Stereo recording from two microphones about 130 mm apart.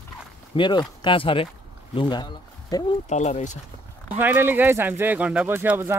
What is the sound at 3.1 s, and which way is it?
Speech, 65° left (ahead or behind).